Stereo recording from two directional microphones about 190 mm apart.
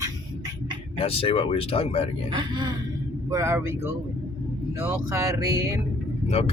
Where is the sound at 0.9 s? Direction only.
30° left (ahead or behind).